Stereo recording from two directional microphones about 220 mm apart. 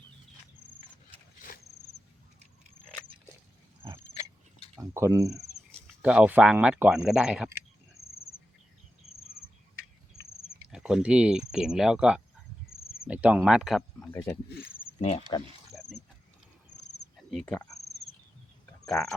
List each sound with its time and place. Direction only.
4.8 s speech: 15° right (ahead or behind)
9.2 s cricket: 45° left (ahead or behind)
10.2 s a sound: 25° left (ahead or behind)
10.7 s speech: 5° right (ahead or behind)
14.1 s speech: 10° left (ahead or behind)
15.7 s wild animals: centre (ahead or behind)
17.3 s speech: 5° left (ahead or behind)
18.9 s speech: centre (ahead or behind)